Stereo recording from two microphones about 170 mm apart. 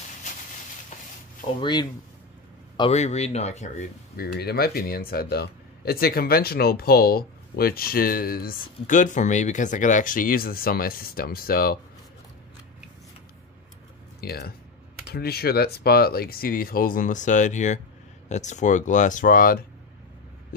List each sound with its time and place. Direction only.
1.6 s speech: 25° left (ahead or behind)
2.8 s speech: 40° left (ahead or behind)
4.2 s speech: 65° left (ahead or behind)
14.2 s speech: 65° left (ahead or behind)